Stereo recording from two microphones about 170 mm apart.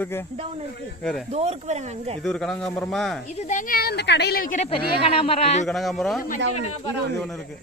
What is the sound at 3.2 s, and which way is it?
A woman's voice, 45° left (ahead or behind).